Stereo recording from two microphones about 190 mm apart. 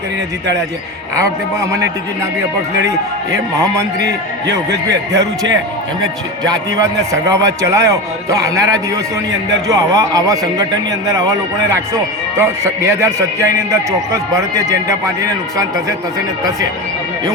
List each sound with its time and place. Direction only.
1.1 s a man's voice: 15° right (ahead or behind)
3.3 s a man's voice: 15° right (ahead or behind)
6.7 s a man's voice: 15° right (ahead or behind)